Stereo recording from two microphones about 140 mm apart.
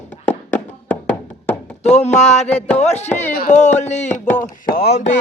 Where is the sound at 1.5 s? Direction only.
55° left (ahead or behind).